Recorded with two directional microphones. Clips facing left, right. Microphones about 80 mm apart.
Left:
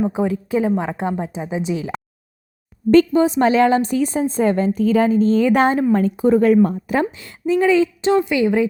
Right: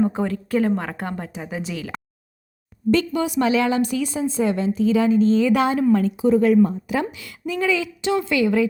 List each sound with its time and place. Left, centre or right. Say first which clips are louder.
0.0 s a woman's voice: left 2 dB; centre
3.1 s a woman's voice: left 5 dB; left
8.2 s a woman's voice: left 2 dB; left